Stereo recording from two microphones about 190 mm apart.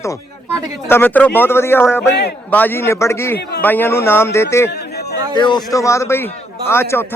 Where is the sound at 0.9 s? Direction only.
10° left (ahead or behind).